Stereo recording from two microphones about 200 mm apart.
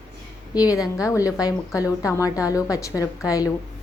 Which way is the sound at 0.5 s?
20° left (ahead or behind).